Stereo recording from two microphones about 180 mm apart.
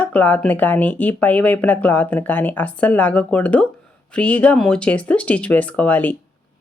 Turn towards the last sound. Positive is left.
turn(degrees=10)  # may be behind; listen again after turning